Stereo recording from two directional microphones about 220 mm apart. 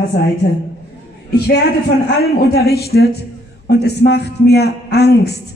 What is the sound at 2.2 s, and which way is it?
A man's voice, 45° left (ahead or behind).